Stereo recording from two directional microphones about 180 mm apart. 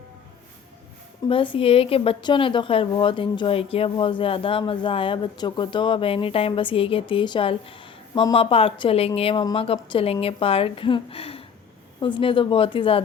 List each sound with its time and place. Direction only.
1.3 s a woman's voice: 30° left (ahead or behind)